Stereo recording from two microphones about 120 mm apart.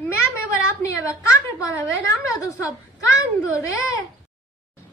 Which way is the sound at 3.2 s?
25° left (ahead or behind).